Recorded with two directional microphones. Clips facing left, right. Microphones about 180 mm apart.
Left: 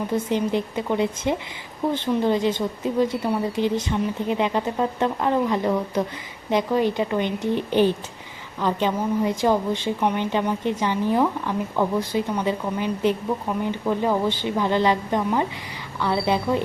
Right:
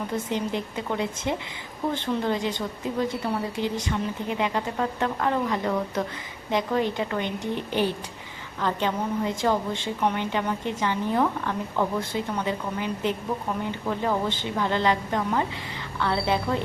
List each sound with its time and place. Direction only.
0.1 s a woman's voice: 20° left (ahead or behind)